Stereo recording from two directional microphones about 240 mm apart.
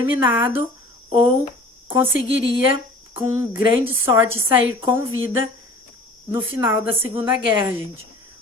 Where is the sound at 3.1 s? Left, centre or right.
Centre.